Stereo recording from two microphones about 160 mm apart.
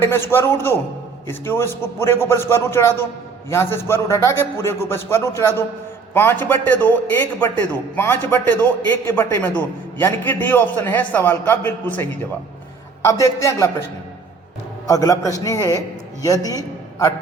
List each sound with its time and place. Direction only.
0.0 s a man's voice: 15° left (ahead or behind)
14.8 s a man's voice: 20° left (ahead or behind)